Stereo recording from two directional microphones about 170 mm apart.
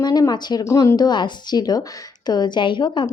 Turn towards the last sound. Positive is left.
turn(degrees=30)  # may be behind; listen again after turning